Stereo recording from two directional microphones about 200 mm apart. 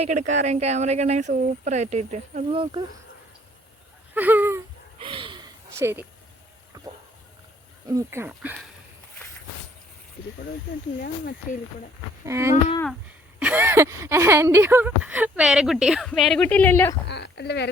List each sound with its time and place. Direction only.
0.0 s speech: 35° right (ahead or behind)
4.1 s speech: 10° right (ahead or behind)
4.9 s gasp: 25° right (ahead or behind)
5.7 s speech: 10° right (ahead or behind)
7.9 s speech: 15° right (ahead or behind)
12.2 s speech: 15° right (ahead or behind); by 16.9 s 10° left (ahead or behind)
17.1 s speech: 60° left (ahead or behind)